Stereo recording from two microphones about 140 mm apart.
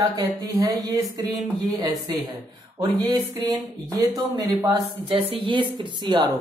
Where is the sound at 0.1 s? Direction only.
25° right (ahead or behind).